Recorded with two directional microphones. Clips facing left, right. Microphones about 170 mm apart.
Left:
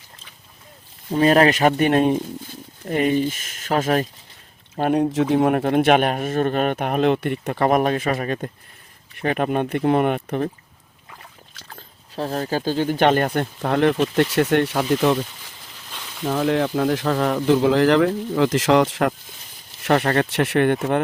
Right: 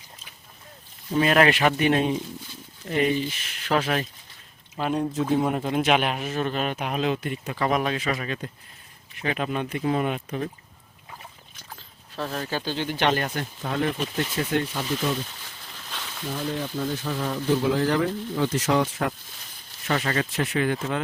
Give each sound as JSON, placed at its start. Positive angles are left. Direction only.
{"t": 1.1, "sound": "speech", "side_deg": 35}
{"t": 4.8, "sound": "a man's voice", "side_deg": 55}
{"t": 5.1, "sound": "a man's voice", "side_deg": 80}
{"t": 12.1, "sound": "a man's voice", "side_deg": 35}
{"t": 15.9, "sound": "a sound", "side_deg": 5}
{"t": 16.2, "sound": "speech", "side_deg": 85}
{"t": 19.8, "sound": "a man's voice", "side_deg": 60}